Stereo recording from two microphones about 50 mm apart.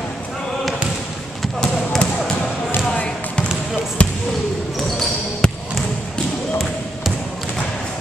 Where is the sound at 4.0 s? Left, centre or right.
Left.